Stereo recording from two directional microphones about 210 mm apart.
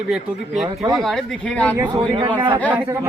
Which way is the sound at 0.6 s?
20° right (ahead or behind).